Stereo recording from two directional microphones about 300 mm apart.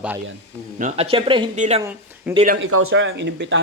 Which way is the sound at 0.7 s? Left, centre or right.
Right.